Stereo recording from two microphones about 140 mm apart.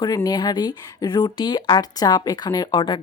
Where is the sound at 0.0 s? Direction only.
25° left (ahead or behind).